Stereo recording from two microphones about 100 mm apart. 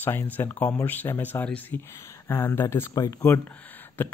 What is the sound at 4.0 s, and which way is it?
Speech, 20° left (ahead or behind).